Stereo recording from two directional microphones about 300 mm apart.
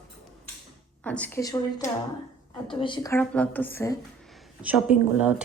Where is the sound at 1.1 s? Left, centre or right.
Centre.